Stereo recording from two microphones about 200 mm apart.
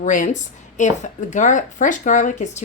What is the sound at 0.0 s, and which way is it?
A woman's voice, 40° left (ahead or behind).